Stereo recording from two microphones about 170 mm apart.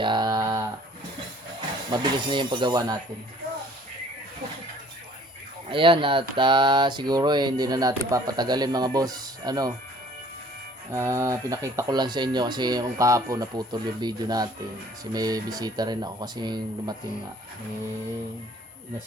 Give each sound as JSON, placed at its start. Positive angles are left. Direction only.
{"t": 0.0, "sound": "a sound", "side_deg": -25}
{"t": 1.9, "sound": "speech", "side_deg": -25}
{"t": 5.6, "sound": "speech", "side_deg": -30}
{"t": 10.9, "sound": "speech", "side_deg": -20}